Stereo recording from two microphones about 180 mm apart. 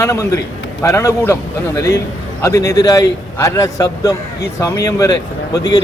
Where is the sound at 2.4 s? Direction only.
20° left (ahead or behind).